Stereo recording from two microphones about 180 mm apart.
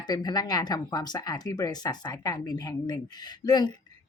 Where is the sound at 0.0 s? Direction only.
20° left (ahead or behind).